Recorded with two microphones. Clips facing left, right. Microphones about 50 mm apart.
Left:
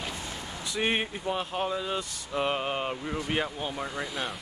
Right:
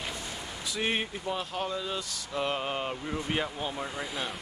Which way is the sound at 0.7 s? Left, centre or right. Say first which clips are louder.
Left 3 dB; centre.